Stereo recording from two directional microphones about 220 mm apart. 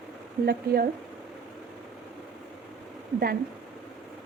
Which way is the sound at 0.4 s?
40° right (ahead or behind).